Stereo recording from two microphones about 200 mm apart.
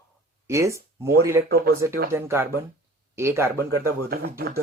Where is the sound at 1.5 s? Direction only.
50° right (ahead or behind).